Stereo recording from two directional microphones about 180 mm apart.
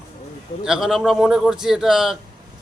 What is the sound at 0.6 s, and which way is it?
Speech, centre (ahead or behind).